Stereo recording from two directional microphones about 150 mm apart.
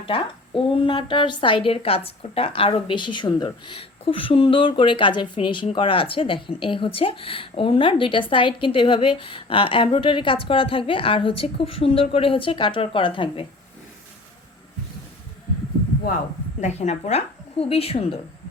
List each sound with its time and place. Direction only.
0.0 s speech: 35° left (ahead or behind)
16.6 s a woman's voice: 50° left (ahead or behind)